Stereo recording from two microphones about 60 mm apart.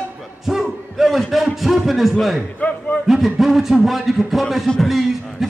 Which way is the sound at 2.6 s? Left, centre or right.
Left.